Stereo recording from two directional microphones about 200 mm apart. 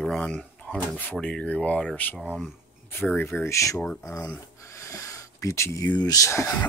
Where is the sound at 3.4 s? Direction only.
15° left (ahead or behind).